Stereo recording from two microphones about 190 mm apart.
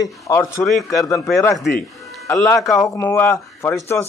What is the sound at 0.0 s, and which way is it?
A man's voice, 15° left (ahead or behind).